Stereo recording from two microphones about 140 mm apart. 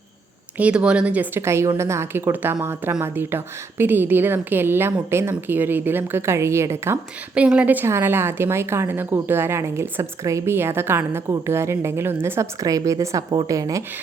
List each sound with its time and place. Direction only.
0.5 s a woman's voice: 10° right (ahead or behind); by 13.8 s 25° right (ahead or behind)